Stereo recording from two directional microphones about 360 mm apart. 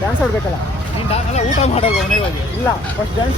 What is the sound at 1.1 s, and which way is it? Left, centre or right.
Speech, centre.